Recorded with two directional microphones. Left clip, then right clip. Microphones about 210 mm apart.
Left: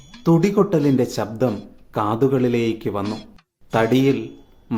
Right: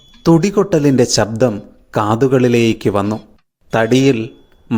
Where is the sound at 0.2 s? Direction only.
30° right (ahead or behind).